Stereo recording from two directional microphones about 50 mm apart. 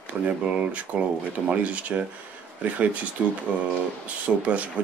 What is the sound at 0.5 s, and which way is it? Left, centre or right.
Speech, right.